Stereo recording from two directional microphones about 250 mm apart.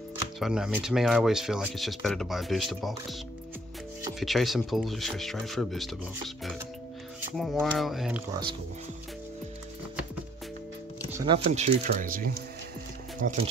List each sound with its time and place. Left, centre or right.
0.4 s speech: centre
4.2 s speech: centre
8.3 s speech: centre
11.1 s music: centre
11.3 s speech: right